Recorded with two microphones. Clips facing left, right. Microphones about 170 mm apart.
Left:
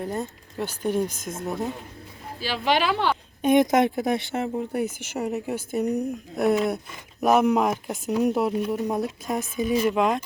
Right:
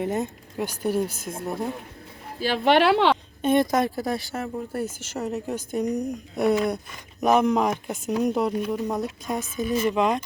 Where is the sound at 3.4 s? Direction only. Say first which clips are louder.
Left 5 dB; 15° left (ahead or behind).